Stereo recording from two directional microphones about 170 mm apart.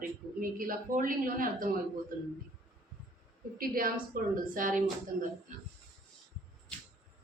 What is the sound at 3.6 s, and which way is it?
A woman's voice, 55° right (ahead or behind).